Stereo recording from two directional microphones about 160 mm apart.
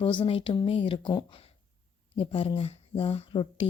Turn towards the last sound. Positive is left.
turn(degrees=35)  # may be behind; listen again after turning